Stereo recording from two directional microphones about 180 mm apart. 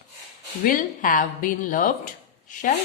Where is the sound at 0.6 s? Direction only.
45° left (ahead or behind).